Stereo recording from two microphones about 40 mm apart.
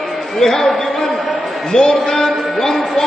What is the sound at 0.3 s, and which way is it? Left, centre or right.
Speech, centre.